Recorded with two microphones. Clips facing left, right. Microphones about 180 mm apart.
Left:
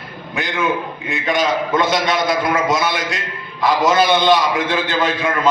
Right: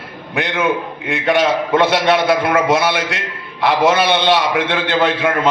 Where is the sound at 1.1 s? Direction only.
70° right (ahead or behind).